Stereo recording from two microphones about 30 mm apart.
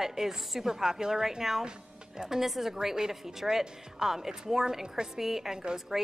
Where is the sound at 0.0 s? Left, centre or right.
Centre.